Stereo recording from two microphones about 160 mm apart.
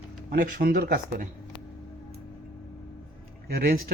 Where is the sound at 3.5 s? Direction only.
65° right (ahead or behind).